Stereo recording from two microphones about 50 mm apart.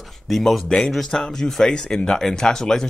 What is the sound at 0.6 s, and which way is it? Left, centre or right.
A man's voice, centre.